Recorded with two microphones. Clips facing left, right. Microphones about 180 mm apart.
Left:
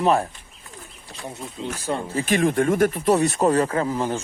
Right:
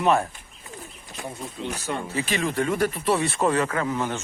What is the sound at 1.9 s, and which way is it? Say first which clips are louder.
Speech: left 4 dB; 35° left (ahead or behind).